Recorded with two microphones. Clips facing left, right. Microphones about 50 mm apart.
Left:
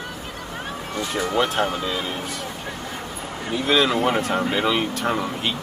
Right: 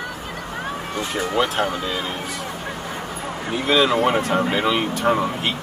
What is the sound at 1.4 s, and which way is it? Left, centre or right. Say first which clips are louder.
Speech: right 1 dB; centre.